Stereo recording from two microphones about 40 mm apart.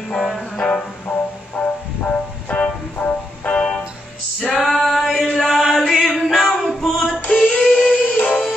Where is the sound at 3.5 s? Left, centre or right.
Left.